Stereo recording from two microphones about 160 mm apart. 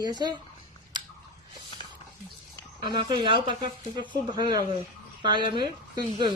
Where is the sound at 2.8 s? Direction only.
30° right (ahead or behind).